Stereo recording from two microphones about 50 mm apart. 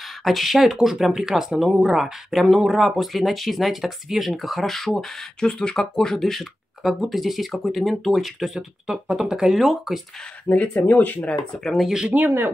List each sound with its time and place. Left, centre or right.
0.2 s speech: centre
8.5 s speech: centre
10.5 s speech: left
11.6 s speech: centre
12.1 s speech: right